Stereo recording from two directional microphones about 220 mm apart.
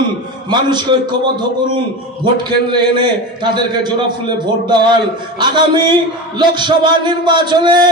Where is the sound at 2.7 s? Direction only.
20° right (ahead or behind).